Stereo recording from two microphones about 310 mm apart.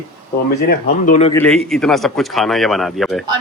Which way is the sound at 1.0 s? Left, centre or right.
Left.